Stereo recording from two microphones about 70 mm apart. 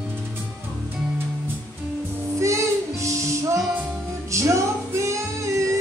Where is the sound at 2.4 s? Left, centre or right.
Right.